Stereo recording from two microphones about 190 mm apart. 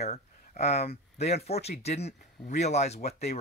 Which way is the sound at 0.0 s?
35° left (ahead or behind).